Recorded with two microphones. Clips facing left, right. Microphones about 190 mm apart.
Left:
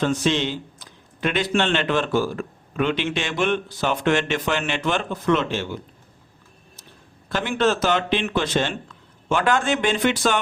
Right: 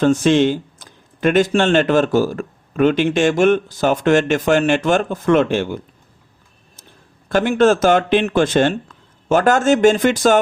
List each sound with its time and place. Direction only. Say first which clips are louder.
0.0 s speech: right 8 dB; 45° right (ahead or behind)
7.3 s speech: right 8 dB; 50° right (ahead or behind)